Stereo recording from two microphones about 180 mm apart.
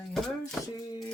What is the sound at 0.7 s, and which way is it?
Speech, 20° left (ahead or behind).